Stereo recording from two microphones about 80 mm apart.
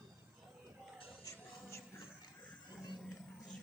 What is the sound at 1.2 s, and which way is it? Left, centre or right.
Music, left.